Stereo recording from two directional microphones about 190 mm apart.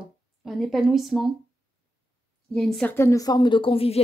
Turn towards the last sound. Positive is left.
turn(degrees=30)  # may be behind; listen again after turning